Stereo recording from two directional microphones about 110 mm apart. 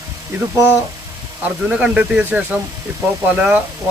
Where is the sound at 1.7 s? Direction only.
10° right (ahead or behind).